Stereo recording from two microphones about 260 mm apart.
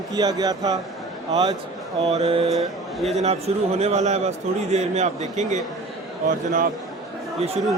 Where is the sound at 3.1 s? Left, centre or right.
Right.